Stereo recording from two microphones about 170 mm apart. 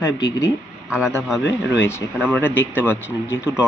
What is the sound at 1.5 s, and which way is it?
Speech, 15° left (ahead or behind).